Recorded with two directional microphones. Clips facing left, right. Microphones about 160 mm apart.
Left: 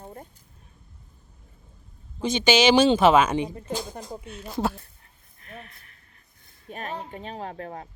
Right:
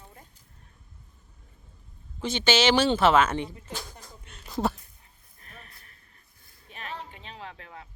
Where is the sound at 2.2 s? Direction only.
15° left (ahead or behind).